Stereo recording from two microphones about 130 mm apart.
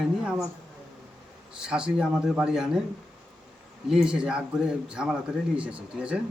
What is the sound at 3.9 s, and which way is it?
A man's voice, 5° right (ahead or behind).